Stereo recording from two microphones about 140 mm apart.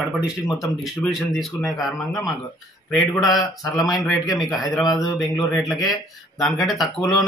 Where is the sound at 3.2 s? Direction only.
Centre (ahead or behind).